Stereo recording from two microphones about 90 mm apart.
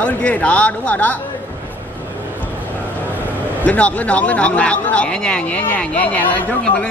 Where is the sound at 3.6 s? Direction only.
15° left (ahead or behind).